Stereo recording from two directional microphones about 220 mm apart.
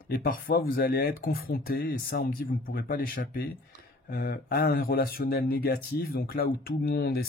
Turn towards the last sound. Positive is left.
turn(degrees=45)  # may be behind; listen again after turning